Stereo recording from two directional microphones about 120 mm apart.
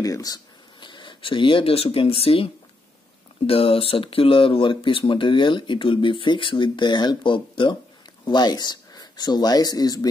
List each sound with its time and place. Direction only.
0.0 s speech: 30° left (ahead or behind)